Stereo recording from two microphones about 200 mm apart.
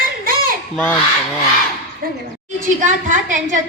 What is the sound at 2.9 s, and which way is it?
Speech, 40° right (ahead or behind).